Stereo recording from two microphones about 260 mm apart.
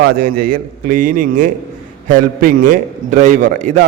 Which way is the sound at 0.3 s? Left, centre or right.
Right.